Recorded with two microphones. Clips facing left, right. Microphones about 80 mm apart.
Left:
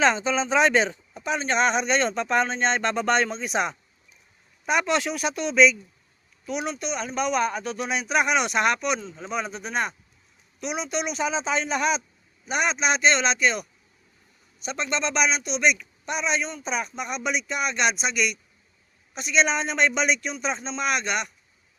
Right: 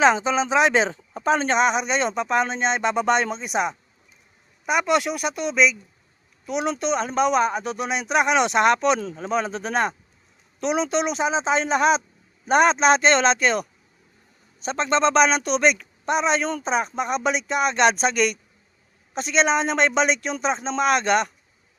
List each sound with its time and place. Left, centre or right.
0.0 s speech: centre
1.1 s speech: right
1.5 s speech: centre
6.4 s a man's voice: right
9.0 s speech: right
9.2 s a man's voice: right
12.5 s a man's voice: right